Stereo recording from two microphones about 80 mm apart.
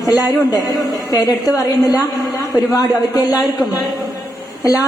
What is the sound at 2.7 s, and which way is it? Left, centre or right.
Speech, left.